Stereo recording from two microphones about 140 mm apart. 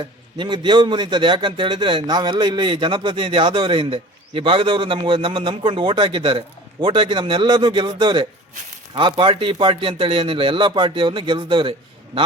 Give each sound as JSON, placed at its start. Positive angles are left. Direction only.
{"t": 0.0, "sound": "a man's voice", "side_deg": -35}